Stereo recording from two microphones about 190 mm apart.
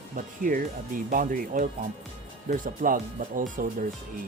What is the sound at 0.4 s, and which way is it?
Speech, 45° right (ahead or behind).